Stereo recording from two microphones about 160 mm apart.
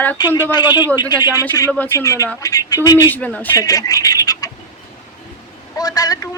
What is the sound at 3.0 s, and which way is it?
Speech, 10° left (ahead or behind).